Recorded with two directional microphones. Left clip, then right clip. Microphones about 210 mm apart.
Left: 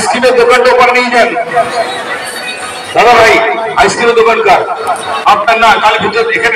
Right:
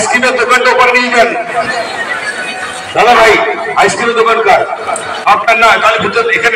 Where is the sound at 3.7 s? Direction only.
20° left (ahead or behind).